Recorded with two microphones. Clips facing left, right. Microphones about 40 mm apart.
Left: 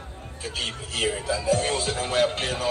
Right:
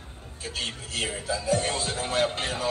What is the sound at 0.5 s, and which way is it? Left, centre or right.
Music, left.